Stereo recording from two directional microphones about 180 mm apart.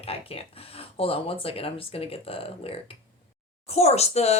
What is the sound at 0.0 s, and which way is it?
Speech, 35° left (ahead or behind).